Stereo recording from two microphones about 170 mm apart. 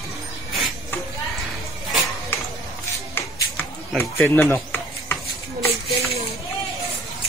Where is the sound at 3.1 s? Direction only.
10° left (ahead or behind).